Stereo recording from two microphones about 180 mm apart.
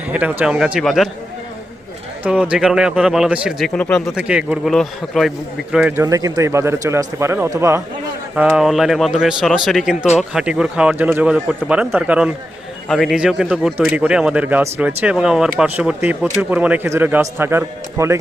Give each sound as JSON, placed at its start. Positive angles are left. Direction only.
{"t": 0.1, "sound": "a man's voice", "side_deg": -10}
{"t": 2.2, "sound": "a man's voice", "side_deg": -5}
{"t": 6.1, "sound": "speech", "side_deg": -20}
{"t": 8.4, "sound": "a man's voice", "side_deg": -5}